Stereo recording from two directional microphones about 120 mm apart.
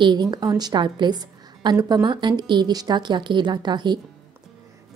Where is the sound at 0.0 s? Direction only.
40° right (ahead or behind).